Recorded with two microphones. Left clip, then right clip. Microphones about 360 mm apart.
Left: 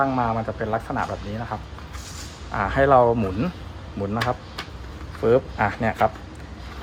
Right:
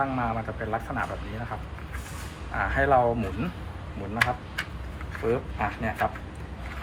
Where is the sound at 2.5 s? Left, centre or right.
Left.